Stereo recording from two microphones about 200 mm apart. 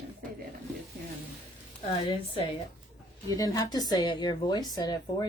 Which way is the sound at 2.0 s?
25° left (ahead or behind).